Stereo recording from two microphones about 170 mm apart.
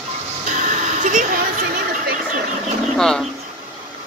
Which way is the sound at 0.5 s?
45° right (ahead or behind).